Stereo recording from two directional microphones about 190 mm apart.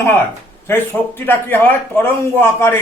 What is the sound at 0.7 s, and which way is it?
A man's voice, 10° left (ahead or behind).